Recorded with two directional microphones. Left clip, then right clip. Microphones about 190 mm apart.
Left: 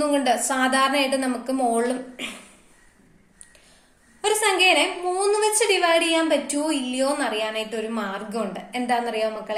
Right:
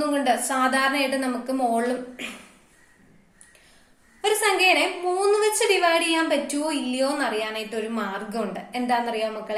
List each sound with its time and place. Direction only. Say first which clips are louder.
0.0 s a woman's voice: left 2 dB; 15° left (ahead or behind)
4.2 s a woman's voice: left 1 dB; 15° left (ahead or behind)